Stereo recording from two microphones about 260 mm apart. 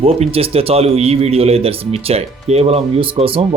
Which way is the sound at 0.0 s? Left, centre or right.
Right.